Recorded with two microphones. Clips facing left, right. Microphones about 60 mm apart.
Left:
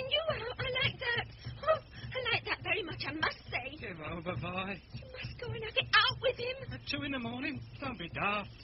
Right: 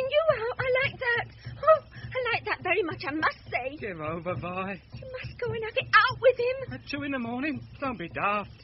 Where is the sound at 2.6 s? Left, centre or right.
Right.